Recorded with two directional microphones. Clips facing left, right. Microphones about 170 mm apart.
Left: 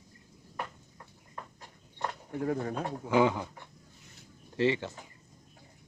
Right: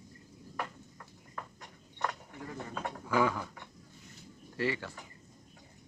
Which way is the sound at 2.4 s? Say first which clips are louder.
Left 13 dB; 60° left (ahead or behind).